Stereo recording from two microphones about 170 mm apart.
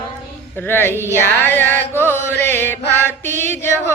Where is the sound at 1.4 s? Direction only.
15° left (ahead or behind).